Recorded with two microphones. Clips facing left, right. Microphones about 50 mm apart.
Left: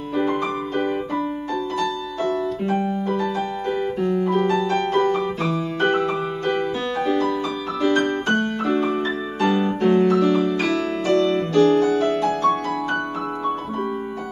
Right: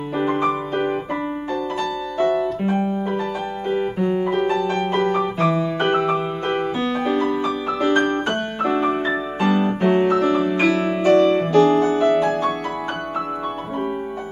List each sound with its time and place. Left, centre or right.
2.1 s music: right
4.0 s piano: centre
6.8 s music: centre
9.4 s music: centre